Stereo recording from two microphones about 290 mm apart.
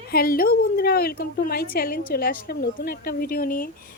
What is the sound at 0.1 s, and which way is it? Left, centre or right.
A woman's voice, left.